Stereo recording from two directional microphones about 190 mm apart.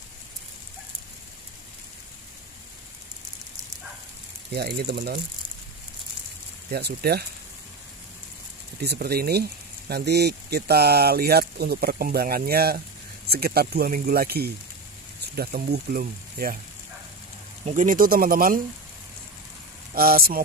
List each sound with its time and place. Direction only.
4.5 s speech: 60° right (ahead or behind)
6.7 s speech: 55° right (ahead or behind)
8.8 s speech: 55° right (ahead or behind)
17.6 s speech: 45° right (ahead or behind)
19.9 s speech: 50° right (ahead or behind)